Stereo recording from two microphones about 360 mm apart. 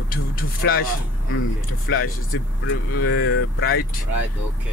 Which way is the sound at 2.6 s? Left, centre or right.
Left.